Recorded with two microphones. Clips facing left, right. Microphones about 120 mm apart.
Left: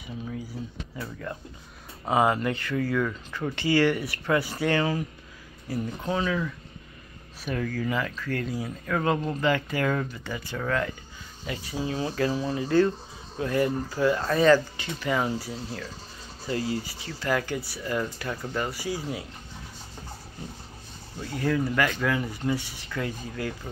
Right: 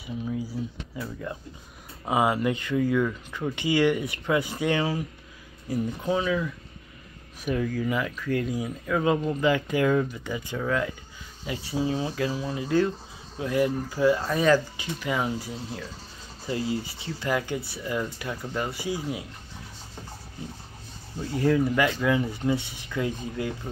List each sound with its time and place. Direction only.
0.9 s speech: 5° right (ahead or behind)
12.2 s speech: 5° right (ahead or behind)
21.4 s speech: 20° right (ahead or behind)